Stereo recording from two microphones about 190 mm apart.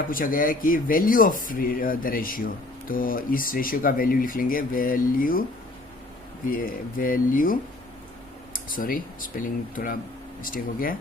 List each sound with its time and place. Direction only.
0.1 s speech: 45° left (ahead or behind)
6.5 s speech: 50° left (ahead or behind)